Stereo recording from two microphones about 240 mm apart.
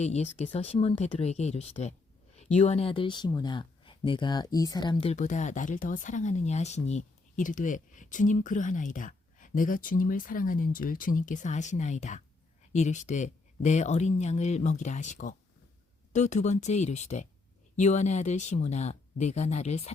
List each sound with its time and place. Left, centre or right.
0.0 s speech: left